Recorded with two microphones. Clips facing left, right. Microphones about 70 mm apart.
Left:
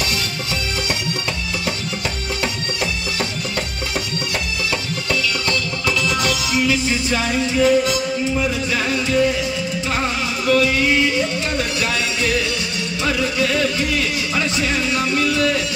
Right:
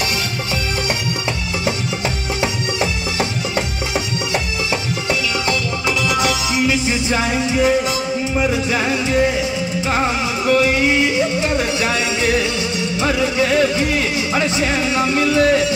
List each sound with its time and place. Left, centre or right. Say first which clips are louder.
2.4 s music: right 4 dB; right
5.5 s music: right 2 dB; centre